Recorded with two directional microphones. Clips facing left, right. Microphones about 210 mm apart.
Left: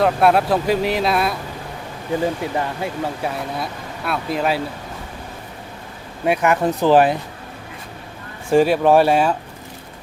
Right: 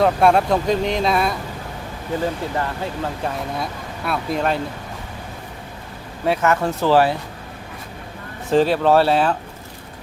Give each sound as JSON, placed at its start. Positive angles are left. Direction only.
{"t": 0.0, "sound": "speech", "side_deg": 5}
{"t": 2.4, "sound": "speech", "side_deg": 15}
{"t": 6.2, "sound": "speech", "side_deg": 15}
{"t": 8.4, "sound": "speech", "side_deg": 10}